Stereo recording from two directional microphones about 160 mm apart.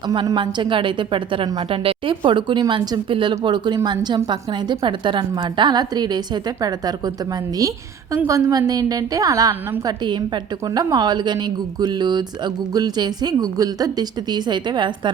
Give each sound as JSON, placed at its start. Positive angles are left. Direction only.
{"t": 0.1, "sound": "a woman's voice", "side_deg": -25}